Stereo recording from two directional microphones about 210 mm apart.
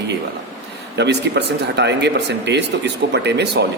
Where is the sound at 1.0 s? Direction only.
55° right (ahead or behind).